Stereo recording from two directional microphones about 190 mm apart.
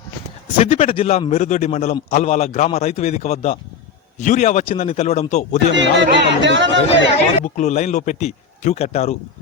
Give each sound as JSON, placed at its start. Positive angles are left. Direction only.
{"t": 0.6, "sound": "a man's voice", "side_deg": 35}
{"t": 5.7, "sound": "speech", "side_deg": -70}
{"t": 7.4, "sound": "a man's voice", "side_deg": 40}